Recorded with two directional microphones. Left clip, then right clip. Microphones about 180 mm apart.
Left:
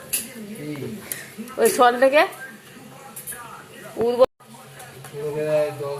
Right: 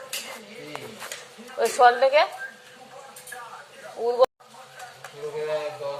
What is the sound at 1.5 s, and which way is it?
Speech, 10° left (ahead or behind).